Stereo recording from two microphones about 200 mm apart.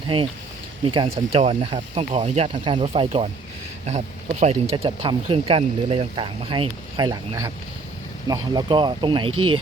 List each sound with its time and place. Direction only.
0.1 s speech: 25° right (ahead or behind)
9.3 s speech: 90° right